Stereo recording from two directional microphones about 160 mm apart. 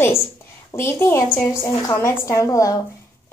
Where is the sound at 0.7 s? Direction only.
15° left (ahead or behind).